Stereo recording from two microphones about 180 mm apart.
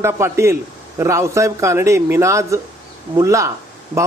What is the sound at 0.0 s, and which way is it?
A man's voice, 15° right (ahead or behind).